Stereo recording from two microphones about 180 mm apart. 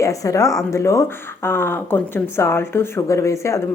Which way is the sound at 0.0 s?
20° left (ahead or behind).